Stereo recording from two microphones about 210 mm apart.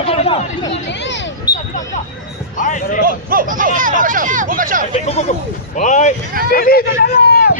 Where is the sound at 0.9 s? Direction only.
55° left (ahead or behind).